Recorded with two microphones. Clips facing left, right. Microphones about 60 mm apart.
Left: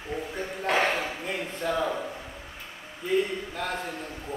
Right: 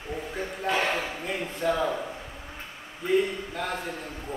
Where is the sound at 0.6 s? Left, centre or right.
Left.